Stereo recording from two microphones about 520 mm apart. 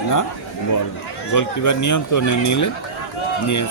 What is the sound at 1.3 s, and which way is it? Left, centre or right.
A man's voice, left.